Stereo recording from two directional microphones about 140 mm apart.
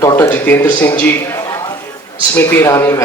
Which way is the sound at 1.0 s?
15° left (ahead or behind).